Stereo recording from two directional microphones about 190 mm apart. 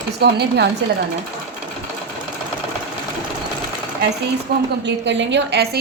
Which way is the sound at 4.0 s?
60° right (ahead or behind).